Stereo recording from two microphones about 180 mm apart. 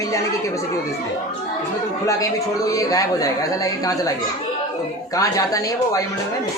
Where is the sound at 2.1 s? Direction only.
20° left (ahead or behind).